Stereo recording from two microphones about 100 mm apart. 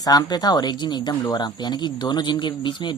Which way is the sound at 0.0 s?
40° left (ahead or behind).